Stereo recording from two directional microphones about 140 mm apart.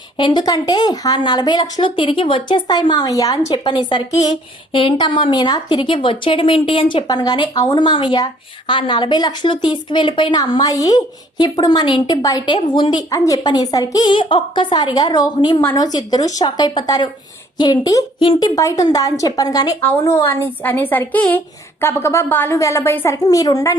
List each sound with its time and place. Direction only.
0.2 s a woman's voice: 35° left (ahead or behind)